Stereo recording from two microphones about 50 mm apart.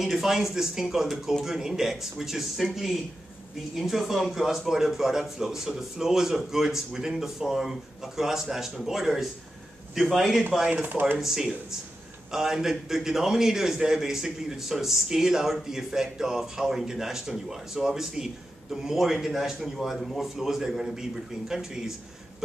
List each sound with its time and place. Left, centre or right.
0.0 s a man's voice: centre
10.7 s speech: right
11.1 s a man's voice: centre